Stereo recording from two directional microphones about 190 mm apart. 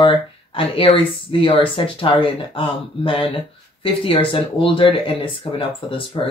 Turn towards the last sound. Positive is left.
turn(degrees=25)  # may be behind; listen again after turning